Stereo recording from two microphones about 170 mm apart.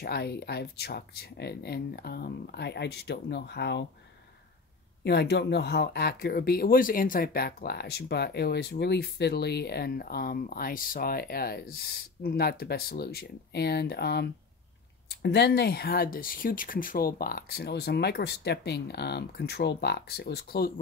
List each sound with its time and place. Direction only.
0.0 s speech: 70° left (ahead or behind); by 3.8 s 85° left
5.0 s speech: 75° left (ahead or behind)